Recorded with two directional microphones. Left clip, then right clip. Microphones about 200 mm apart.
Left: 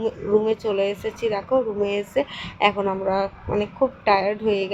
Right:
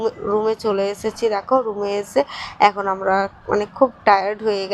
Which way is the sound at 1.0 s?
60° right (ahead or behind).